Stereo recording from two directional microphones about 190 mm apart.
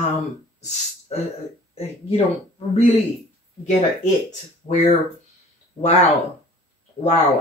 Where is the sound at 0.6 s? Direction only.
35° left (ahead or behind).